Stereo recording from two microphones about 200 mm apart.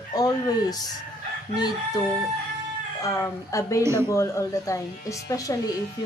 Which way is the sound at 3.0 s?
15° left (ahead or behind).